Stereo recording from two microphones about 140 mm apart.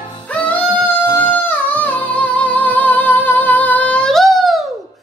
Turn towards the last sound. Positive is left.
turn(degrees=0)  # may be behind; listen again after turning